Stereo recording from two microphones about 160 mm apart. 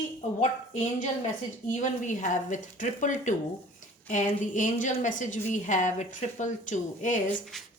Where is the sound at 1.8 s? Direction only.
50° left (ahead or behind).